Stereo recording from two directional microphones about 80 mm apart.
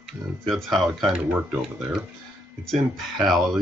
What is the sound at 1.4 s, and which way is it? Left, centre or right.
Speech, centre.